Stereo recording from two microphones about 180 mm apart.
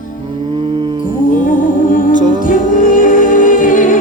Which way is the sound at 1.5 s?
50° left (ahead or behind).